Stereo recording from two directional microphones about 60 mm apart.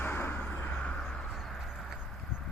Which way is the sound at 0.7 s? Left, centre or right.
Centre.